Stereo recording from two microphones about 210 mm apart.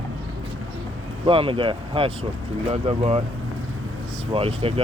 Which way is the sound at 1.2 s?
25° right (ahead or behind).